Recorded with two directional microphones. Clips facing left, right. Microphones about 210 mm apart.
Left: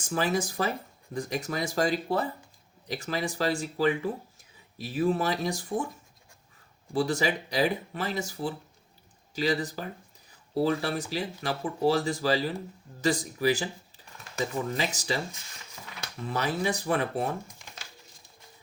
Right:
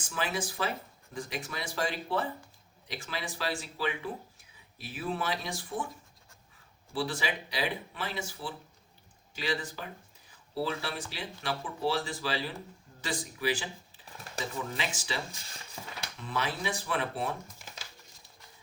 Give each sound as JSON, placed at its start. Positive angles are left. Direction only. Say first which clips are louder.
{"t": 0.1, "sound": "speech", "louder": "left 6 dB", "side_deg": 40}
{"t": 6.9, "sound": "speech", "louder": "left 6 dB", "side_deg": 45}
{"t": 14.8, "sound": "speech", "louder": "left 6 dB", "side_deg": 40}
{"t": 16.3, "sound": "speech", "louder": "left 5 dB", "side_deg": 40}